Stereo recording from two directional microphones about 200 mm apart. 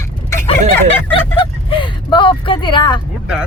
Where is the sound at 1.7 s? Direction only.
25° left (ahead or behind).